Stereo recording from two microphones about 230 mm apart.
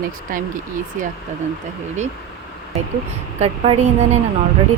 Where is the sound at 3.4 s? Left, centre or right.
Right.